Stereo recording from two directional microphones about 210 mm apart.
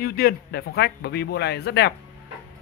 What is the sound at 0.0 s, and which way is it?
Speech, 45° left (ahead or behind).